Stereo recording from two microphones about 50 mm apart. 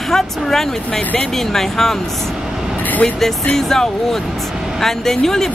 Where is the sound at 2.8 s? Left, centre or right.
Left.